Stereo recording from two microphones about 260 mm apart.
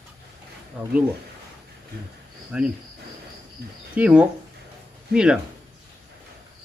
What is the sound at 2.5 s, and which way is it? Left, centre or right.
Speech, centre.